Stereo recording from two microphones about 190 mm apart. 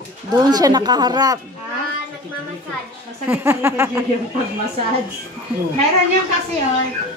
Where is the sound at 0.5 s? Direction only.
20° right (ahead or behind).